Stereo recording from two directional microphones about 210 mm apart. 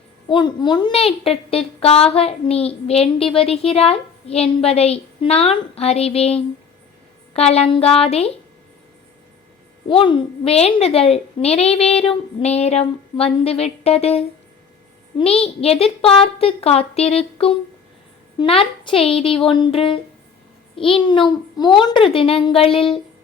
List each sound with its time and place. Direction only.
0.3 s a woman's voice: 20° left (ahead or behind)
9.9 s a woman's voice: 25° left (ahead or behind)